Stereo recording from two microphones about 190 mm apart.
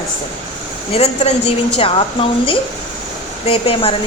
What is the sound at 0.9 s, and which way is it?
A woman's voice, 30° left (ahead or behind).